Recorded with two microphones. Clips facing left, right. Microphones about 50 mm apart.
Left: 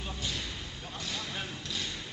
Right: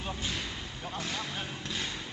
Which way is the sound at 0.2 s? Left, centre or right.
Right.